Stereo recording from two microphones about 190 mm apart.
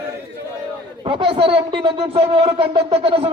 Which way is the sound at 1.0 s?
30° right (ahead or behind).